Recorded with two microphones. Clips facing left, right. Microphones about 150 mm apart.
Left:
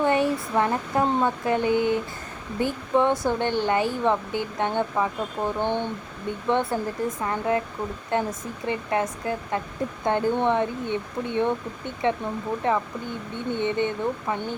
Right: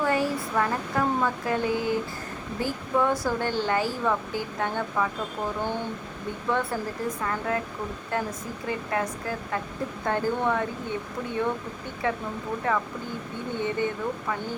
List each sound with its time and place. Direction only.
0.0 s speech: 25° left (ahead or behind)